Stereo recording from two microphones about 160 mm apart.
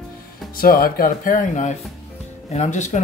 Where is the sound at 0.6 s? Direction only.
65° left (ahead or behind).